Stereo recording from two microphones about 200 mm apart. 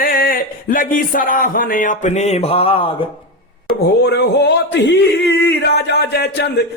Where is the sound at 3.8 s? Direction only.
55° left (ahead or behind).